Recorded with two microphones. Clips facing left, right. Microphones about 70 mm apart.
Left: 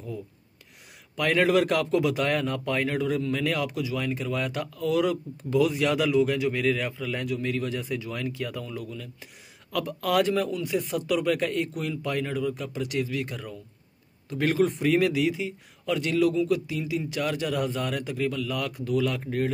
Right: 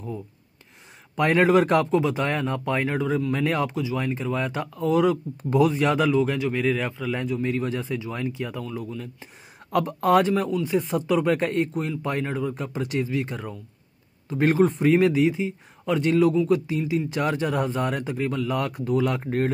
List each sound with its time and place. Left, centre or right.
1.1 s a man's voice: right
9.7 s speech: right
10.2 s a man's voice: right
10.6 s a man's voice: right